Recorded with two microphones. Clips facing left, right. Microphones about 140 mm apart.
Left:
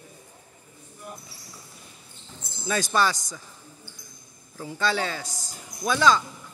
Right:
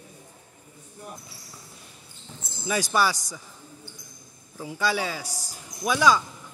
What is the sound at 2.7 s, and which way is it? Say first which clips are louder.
Speech: even; 10° right (ahead or behind).